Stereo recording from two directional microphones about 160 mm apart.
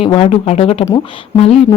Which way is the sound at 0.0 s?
35° left (ahead or behind).